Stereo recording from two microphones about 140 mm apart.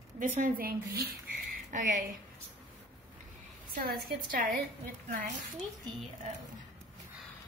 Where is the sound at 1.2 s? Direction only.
70° right (ahead or behind).